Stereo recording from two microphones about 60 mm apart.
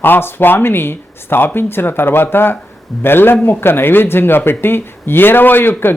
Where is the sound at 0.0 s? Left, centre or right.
Left.